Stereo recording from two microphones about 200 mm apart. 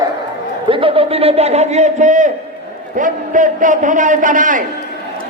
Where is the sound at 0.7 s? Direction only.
25° right (ahead or behind).